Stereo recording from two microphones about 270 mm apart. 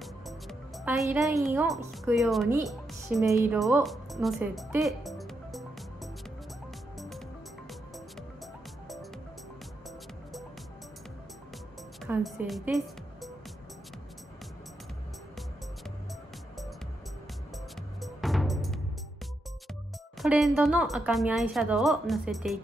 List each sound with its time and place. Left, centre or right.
0.0 s music: centre
1.0 s speech: centre
2.7 s music: centre
3.2 s speech: centre
3.5 s speech: centre
12.0 s speech: centre
18.0 s music: centre
20.2 s speech: centre